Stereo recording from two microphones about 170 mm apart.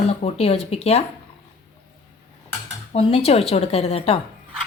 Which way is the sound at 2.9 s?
35° left (ahead or behind).